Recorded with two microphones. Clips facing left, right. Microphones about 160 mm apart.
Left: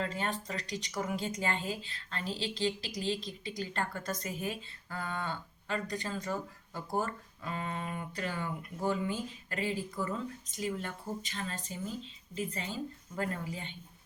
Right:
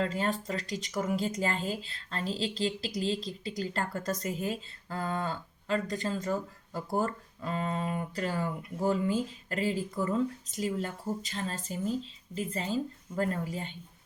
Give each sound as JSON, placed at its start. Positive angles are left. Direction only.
{"t": 0.0, "sound": "a woman's voice", "side_deg": -35}